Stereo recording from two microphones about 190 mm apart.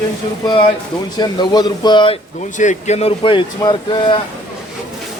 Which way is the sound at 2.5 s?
40° left (ahead or behind).